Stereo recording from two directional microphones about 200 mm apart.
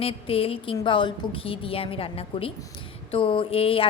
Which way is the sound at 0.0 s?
30° left (ahead or behind).